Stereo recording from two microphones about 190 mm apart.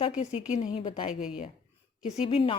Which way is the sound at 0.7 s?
30° left (ahead or behind).